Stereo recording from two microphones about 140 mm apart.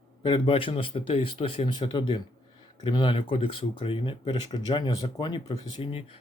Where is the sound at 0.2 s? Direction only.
40° left (ahead or behind).